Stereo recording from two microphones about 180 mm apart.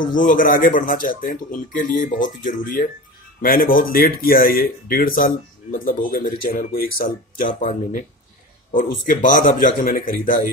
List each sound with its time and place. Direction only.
0.0 s speech: 50° left (ahead or behind)
8.7 s speech: 50° left (ahead or behind)